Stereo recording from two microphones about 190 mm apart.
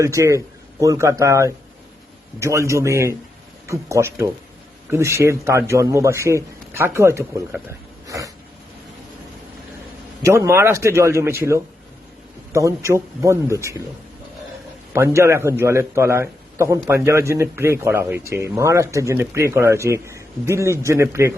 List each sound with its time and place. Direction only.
0.0 s a man's voice: 15° right (ahead or behind)
10.2 s a man's voice: 15° right (ahead or behind)
14.9 s a man's voice: 15° right (ahead or behind)